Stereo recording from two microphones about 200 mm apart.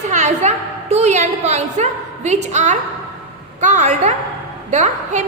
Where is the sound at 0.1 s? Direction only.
35° right (ahead or behind).